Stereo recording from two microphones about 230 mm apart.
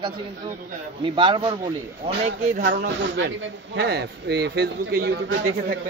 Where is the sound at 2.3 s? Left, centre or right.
Right.